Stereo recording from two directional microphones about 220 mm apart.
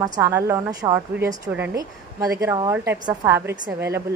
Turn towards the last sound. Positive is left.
turn(degrees=-10)  # may be behind; listen again after turning